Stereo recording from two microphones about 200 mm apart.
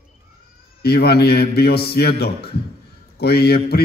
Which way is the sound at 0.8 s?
50° left (ahead or behind).